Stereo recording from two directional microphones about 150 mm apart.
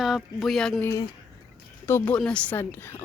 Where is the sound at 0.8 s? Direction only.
25° left (ahead or behind).